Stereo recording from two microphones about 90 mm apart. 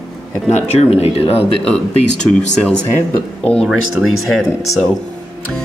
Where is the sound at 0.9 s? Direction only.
90° left.